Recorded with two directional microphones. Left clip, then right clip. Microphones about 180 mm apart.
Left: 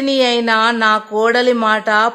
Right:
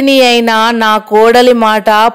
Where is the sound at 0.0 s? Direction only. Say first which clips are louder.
Right 8 dB; 35° right (ahead or behind).